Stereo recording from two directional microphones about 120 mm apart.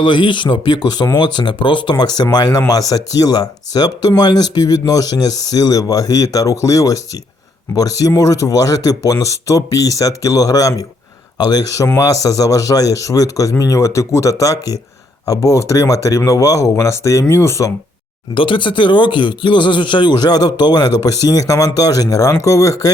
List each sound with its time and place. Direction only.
0.0 s speech: 40° left (ahead or behind); by 17.7 s 25° left (ahead or behind)
18.3 s speech: 45° left (ahead or behind); by 22.9 s 25° left (ahead or behind)